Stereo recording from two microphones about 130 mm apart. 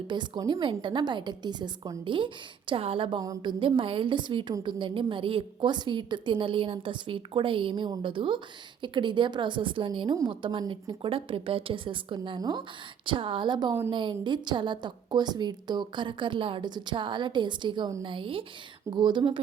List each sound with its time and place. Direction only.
0.1 s a woman's voice: 35° right (ahead or behind)
3.2 s a woman's voice: 30° right (ahead or behind)
3.6 s a woman's voice: 40° right (ahead or behind)